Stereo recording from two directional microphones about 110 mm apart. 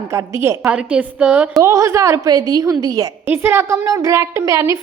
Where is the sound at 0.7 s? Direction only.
10° right (ahead or behind).